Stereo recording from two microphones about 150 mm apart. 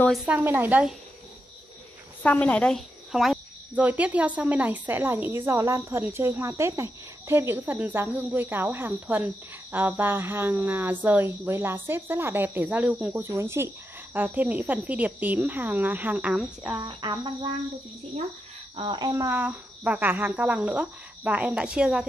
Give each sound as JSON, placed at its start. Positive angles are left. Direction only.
{"t": 0.0, "sound": "speech", "side_deg": 0}
{"t": 0.3, "sound": "speech", "side_deg": -15}
{"t": 2.2, "sound": "speech", "side_deg": 10}
{"t": 16.7, "sound": "cricket", "side_deg": -25}
{"t": 18.8, "sound": "cricket", "side_deg": -30}
{"t": 19.2, "sound": "speech", "side_deg": -15}